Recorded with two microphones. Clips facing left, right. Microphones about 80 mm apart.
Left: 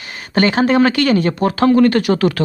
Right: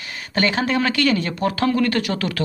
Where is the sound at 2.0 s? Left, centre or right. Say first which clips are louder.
Left 8 dB; left.